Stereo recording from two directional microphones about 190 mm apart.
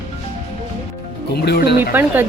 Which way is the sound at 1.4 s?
60° left (ahead or behind).